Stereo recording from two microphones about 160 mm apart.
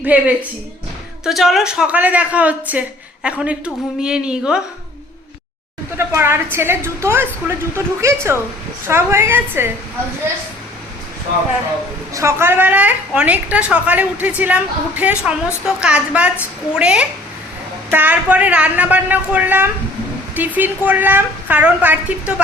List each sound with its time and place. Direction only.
0.0 s a woman's voice: 10° right (ahead or behind)
6.0 s a woman's voice: 15° right (ahead or behind)
12.1 s a woman's voice: 15° right (ahead or behind)